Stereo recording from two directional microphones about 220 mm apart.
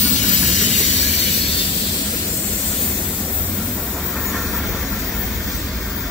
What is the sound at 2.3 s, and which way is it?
Vehicle, 5° left (ahead or behind).